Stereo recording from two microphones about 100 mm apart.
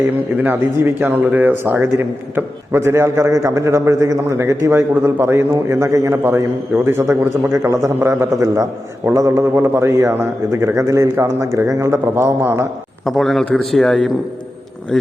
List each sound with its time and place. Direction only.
0.3 s speech: 20° right (ahead or behind)
13.1 s a man's voice: centre (ahead or behind)